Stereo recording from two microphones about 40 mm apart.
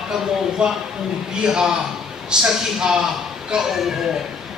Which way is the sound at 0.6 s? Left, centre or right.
Right.